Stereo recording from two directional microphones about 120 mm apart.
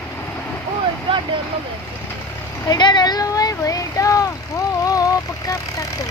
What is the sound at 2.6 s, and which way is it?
Speech, 35° left (ahead or behind).